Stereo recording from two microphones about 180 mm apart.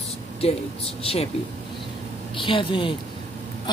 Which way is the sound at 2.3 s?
30° left (ahead or behind).